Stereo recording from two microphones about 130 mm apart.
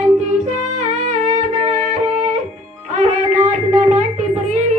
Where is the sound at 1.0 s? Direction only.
70° right (ahead or behind).